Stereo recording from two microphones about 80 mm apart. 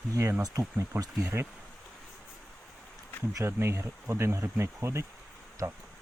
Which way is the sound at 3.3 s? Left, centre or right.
Right.